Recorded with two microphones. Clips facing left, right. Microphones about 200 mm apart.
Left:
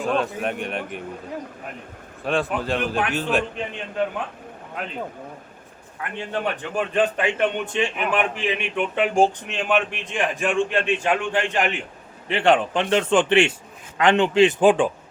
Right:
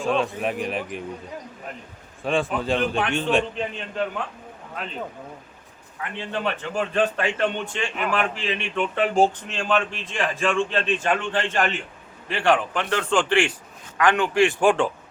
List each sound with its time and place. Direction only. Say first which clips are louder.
0.0 s a man's voice: even; centre (ahead or behind)
2.2 s a man's voice: even; centre (ahead or behind)
6.1 s a man's voice: left 1 dB; 15° left (ahead or behind)